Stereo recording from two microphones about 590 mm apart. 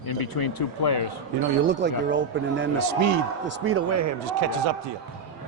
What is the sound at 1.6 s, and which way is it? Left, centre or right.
A man's voice, centre.